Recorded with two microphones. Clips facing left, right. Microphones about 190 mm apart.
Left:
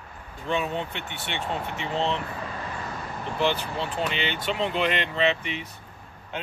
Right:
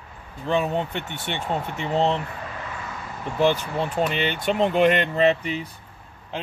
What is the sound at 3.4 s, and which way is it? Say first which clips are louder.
Speech: right 5 dB; 45° right (ahead or behind).